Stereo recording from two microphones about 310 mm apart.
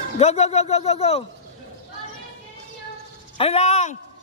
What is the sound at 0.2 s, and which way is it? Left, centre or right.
A man's voice, left.